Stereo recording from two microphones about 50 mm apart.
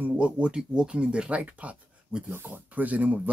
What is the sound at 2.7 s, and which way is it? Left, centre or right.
Speech, right.